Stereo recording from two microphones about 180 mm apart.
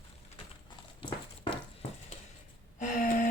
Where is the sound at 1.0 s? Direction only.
30° left (ahead or behind).